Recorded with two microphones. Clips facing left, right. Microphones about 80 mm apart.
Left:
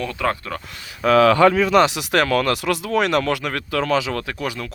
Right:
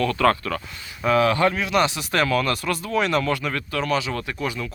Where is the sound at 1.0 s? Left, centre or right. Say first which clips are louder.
Left 4 dB; left.